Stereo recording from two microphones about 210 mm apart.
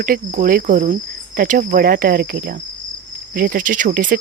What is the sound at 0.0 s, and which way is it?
Cricket, 40° right (ahead or behind).